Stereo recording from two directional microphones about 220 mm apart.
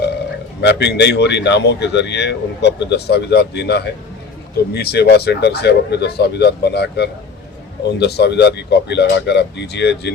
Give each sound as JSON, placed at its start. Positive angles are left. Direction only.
{"t": 0.6, "sound": "speech", "side_deg": 50}